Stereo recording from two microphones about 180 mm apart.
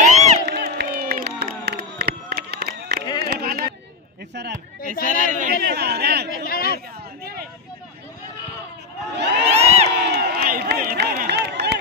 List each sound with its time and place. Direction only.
0.0 s crowd: 40° right (ahead or behind)
0.5 s crowd: 65° right (ahead or behind)
3.2 s a sound: 65° right (ahead or behind)
5.0 s speech: 45° right (ahead or behind)
5.5 s speech: 65° right (ahead or behind)
6.3 s speech: 55° left (ahead or behind)
9.1 s crowd: 70° right (ahead or behind)
9.5 s crowd: 35° right (ahead or behind)
9.8 s crowd: 65° right (ahead or behind)